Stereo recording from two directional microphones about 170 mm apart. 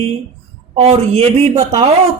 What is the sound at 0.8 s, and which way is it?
Speech, 35° right (ahead or behind).